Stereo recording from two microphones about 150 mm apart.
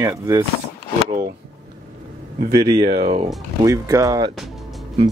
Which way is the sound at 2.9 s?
45° right (ahead or behind).